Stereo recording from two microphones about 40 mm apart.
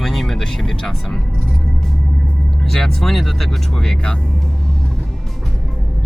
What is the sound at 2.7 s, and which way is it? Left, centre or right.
Speech, centre.